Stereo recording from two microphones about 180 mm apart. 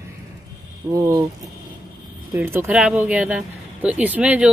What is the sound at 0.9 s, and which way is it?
Speech, 15° right (ahead or behind).